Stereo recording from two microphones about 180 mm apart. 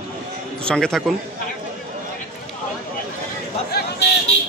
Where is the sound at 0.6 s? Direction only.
5° left (ahead or behind).